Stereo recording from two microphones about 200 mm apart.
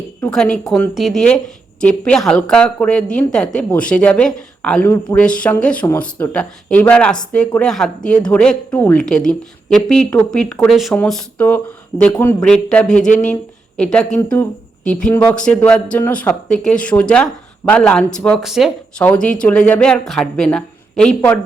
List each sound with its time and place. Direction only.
0.2 s a woman's voice: 5° left (ahead or behind)
12.9 s speech: 40° left (ahead or behind)
13.7 s a woman's voice: 5° left (ahead or behind)